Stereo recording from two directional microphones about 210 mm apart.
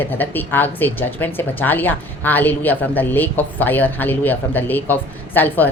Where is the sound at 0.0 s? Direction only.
10° left (ahead or behind).